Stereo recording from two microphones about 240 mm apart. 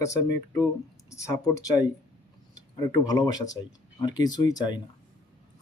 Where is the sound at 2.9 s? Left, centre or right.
Centre.